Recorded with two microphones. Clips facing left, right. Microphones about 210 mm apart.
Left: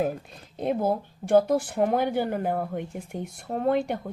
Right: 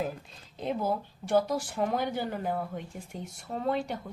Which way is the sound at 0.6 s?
55° left (ahead or behind).